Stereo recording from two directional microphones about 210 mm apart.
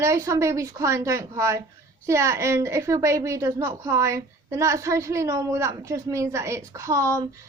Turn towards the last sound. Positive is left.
turn(degrees=-15)  # may be behind; listen again after turning